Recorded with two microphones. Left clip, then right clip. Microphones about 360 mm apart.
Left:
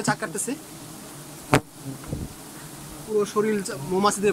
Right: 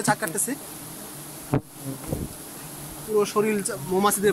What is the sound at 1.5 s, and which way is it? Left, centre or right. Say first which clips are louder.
Insect: left 7 dB; left.